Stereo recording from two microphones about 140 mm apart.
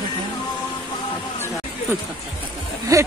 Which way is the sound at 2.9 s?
25° right (ahead or behind).